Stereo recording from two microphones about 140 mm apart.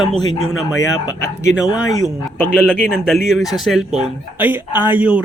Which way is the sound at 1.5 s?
5° right (ahead or behind).